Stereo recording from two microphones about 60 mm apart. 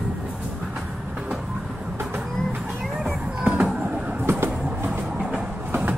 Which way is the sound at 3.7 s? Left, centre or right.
Right.